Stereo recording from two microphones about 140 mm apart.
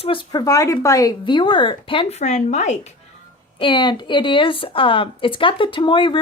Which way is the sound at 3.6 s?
35° left (ahead or behind).